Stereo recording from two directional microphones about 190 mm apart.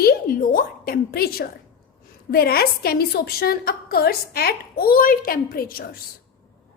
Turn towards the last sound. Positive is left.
turn(degrees=50)  # may be behind; listen again after turning